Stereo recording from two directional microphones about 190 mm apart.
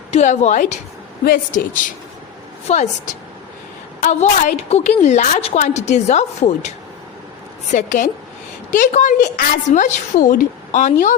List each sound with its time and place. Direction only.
0.1 s a woman's voice: 40° left (ahead or behind)